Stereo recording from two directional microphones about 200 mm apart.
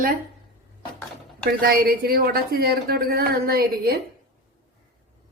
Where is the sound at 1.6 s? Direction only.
50° right (ahead or behind).